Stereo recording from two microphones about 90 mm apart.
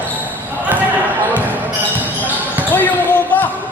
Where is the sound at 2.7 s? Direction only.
20° left (ahead or behind).